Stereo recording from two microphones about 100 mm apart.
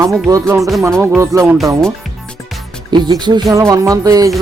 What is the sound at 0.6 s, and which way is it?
Music, centre (ahead or behind).